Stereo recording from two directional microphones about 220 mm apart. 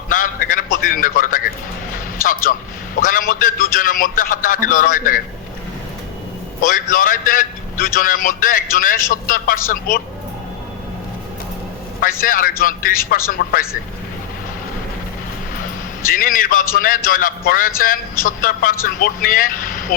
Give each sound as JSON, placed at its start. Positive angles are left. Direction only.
{"t": 0.1, "sound": "a sound", "side_deg": 40}
{"t": 2.4, "sound": "a man's voice", "side_deg": 40}
{"t": 6.6, "sound": "a man's voice", "side_deg": 40}
{"t": 12.2, "sound": "a man's voice", "side_deg": 40}
{"t": 16.0, "sound": "a man's voice", "side_deg": 40}